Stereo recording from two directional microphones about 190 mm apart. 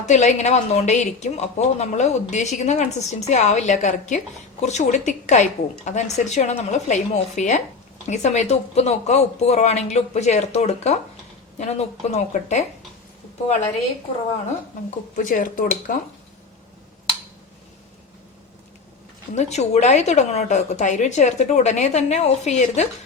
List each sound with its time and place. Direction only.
0.0 s a woman's voice: 40° left (ahead or behind)
14.8 s speech: 40° left (ahead or behind)
19.3 s a woman's voice: 35° left (ahead or behind)